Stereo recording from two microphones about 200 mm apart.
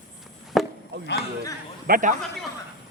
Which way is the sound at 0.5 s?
Centre (ahead or behind).